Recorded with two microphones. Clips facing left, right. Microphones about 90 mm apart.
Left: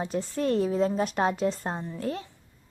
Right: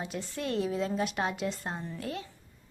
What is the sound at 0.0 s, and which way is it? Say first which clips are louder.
A woman's voice: left 7 dB; 35° left (ahead or behind).